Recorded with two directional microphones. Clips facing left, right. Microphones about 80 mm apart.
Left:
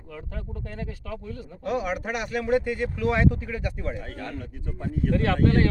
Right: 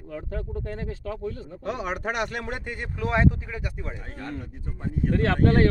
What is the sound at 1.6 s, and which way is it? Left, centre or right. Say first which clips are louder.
Speech: left 2 dB; right.